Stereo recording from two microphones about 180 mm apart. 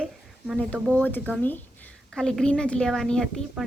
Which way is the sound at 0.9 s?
10° left (ahead or behind).